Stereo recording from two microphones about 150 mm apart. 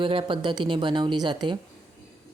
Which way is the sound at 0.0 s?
35° right (ahead or behind).